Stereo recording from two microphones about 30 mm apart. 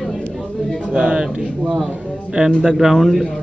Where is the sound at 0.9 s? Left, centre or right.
Right.